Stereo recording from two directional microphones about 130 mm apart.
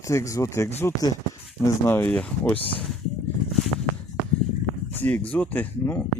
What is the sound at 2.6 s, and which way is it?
Speech, 45° left (ahead or behind).